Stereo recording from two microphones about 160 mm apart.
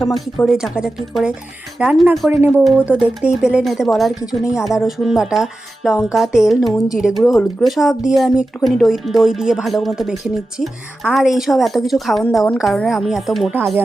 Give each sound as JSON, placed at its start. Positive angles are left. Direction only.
{"t": 0.0, "sound": "speech", "side_deg": 0}
{"t": 2.3, "sound": "speech", "side_deg": -10}